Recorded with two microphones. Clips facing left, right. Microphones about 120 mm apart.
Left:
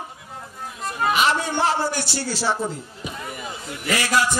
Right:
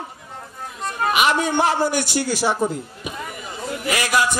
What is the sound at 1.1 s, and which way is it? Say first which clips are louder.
Music: right 3 dB; 15° right (ahead or behind).